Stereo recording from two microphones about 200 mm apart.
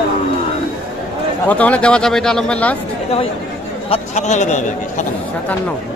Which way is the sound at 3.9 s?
35° left (ahead or behind).